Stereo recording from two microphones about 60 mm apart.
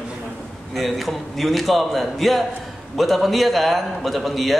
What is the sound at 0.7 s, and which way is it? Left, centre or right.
A man's voice, centre.